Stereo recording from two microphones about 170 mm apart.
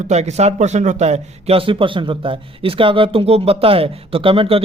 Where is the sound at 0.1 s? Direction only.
40° right (ahead or behind).